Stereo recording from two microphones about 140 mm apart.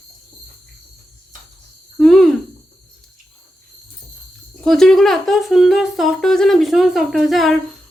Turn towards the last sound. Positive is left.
turn(degrees=0)  # may be behind; listen again after turning